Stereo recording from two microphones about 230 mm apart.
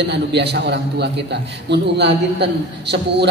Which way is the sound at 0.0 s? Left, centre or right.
Right.